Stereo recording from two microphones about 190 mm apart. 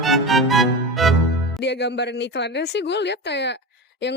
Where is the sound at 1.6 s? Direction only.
65° left (ahead or behind).